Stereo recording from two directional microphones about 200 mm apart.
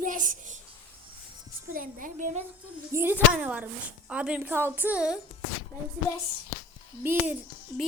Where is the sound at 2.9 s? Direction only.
10° right (ahead or behind).